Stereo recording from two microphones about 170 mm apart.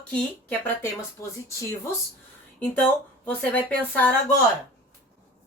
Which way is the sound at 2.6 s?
10° left (ahead or behind).